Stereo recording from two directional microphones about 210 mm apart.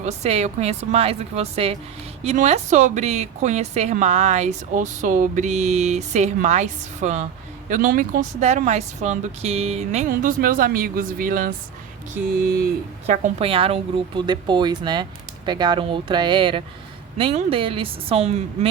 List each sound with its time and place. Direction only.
0.0 s a woman's voice: 30° right (ahead or behind)
13.1 s a woman's voice: 30° right (ahead or behind)